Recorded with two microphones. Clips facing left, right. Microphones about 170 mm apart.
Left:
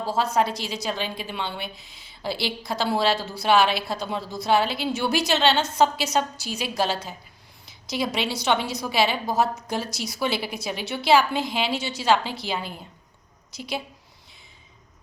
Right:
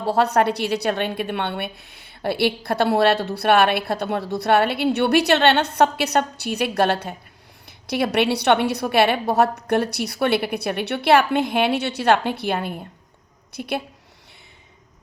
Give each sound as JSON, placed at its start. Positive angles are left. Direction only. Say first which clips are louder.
{"t": 0.0, "sound": "a woman's voice", "louder": "right 5 dB", "side_deg": -65}